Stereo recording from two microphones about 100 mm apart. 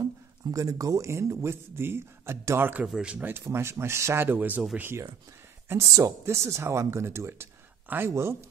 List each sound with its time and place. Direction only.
0.0 s speech: 35° right (ahead or behind)